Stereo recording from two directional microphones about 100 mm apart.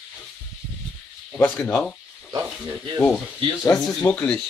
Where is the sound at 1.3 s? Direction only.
15° left (ahead or behind).